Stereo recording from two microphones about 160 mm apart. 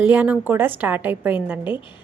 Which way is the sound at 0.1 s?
10° right (ahead or behind).